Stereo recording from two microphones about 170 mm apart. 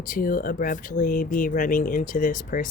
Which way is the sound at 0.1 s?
55° left (ahead or behind).